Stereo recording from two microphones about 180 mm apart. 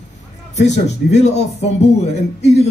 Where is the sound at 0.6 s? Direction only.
40° left (ahead or behind).